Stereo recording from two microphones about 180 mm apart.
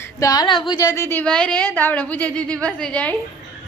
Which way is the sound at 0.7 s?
20° left (ahead or behind).